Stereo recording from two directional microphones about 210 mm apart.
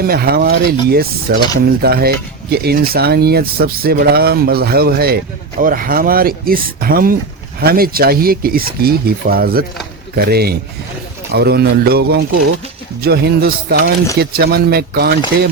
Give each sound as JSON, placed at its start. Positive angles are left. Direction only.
{"t": 0.0, "sound": "speech", "side_deg": -45}